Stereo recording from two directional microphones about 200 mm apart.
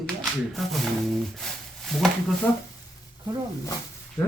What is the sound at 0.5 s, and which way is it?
Speech, centre (ahead or behind).